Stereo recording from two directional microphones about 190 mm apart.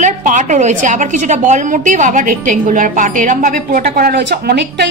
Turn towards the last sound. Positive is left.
turn(degrees=-60)  # may be behind; listen again after turning